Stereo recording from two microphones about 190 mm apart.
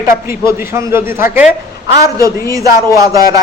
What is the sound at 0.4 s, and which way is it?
A man's voice, 15° right (ahead or behind).